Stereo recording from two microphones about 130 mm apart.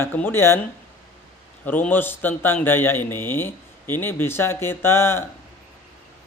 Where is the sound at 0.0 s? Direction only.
15° left (ahead or behind).